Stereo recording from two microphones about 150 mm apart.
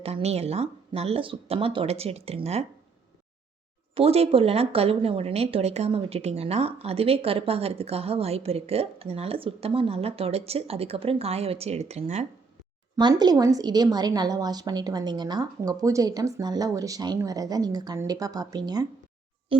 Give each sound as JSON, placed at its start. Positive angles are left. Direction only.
{"t": 0.0, "sound": "speech", "side_deg": -45}
{"t": 3.9, "sound": "speech", "side_deg": -40}
{"t": 13.0, "sound": "a woman's voice", "side_deg": -30}